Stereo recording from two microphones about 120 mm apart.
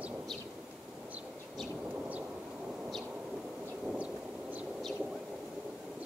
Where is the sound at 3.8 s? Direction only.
10° right (ahead or behind).